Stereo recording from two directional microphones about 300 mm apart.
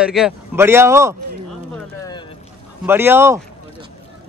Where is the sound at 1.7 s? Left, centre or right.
Centre.